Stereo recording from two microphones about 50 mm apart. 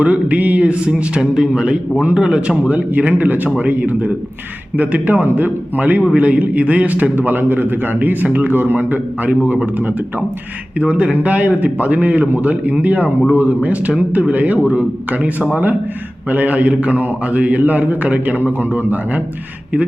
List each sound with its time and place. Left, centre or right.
0.0 s a man's voice: right
10.8 s a man's voice: right